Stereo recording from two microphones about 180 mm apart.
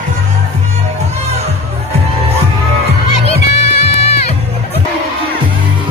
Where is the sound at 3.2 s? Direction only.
35° left (ahead or behind).